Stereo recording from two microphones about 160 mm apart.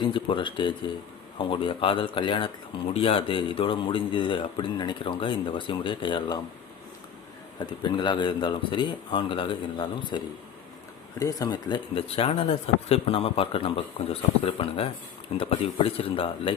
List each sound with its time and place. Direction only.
0.0 s speech: 30° left (ahead or behind)
7.6 s a man's voice: 30° left (ahead or behind)